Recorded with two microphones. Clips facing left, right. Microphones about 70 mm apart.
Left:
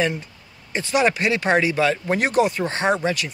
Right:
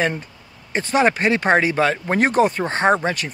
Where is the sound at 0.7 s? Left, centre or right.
Right.